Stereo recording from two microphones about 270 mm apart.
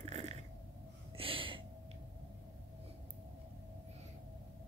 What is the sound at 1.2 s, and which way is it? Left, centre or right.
Gasp, centre.